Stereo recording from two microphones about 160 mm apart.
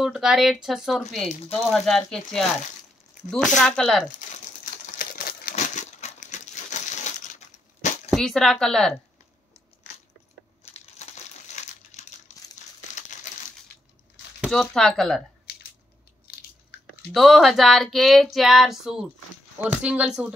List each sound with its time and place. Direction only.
0.0 s female singing: 5° right (ahead or behind)
4.9 s crumpling: 65° left (ahead or behind)
8.1 s female singing: centre (ahead or behind)
10.6 s crumpling: 45° left (ahead or behind)
14.5 s female singing: 5° left (ahead or behind)
16.7 s chewing: 75° left (ahead or behind)
17.1 s female singing: centre (ahead or behind)
19.6 s speech: 5° right (ahead or behind)